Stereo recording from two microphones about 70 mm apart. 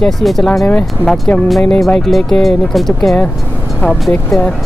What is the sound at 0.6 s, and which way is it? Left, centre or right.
Speech, centre.